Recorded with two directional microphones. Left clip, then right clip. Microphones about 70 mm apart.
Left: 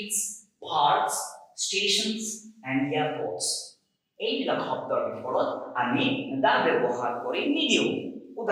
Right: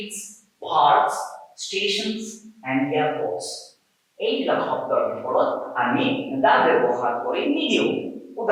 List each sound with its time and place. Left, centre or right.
0.0 s a woman's voice: centre
2.6 s a man's voice: right
3.3 s a man's voice: centre